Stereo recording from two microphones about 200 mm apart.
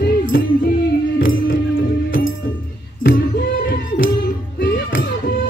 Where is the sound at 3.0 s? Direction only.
45° left (ahead or behind).